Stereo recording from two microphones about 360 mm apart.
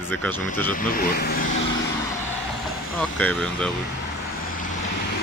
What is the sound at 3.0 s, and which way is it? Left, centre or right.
Speech, centre.